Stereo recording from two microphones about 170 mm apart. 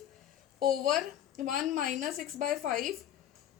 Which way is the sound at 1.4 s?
50° right (ahead or behind).